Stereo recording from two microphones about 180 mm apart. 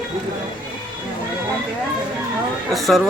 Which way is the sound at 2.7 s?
Centre (ahead or behind).